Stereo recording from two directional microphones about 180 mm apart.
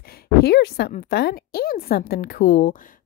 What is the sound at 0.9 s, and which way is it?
Speech, 45° left (ahead or behind).